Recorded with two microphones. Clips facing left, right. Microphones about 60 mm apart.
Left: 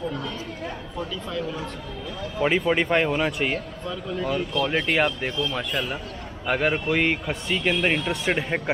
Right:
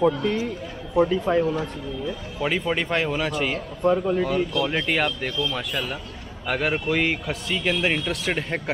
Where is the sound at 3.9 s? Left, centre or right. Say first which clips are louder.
Right 11 dB; right.